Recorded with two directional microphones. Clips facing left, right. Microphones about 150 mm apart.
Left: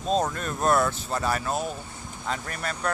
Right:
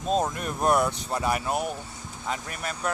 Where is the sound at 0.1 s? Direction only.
10° right (ahead or behind).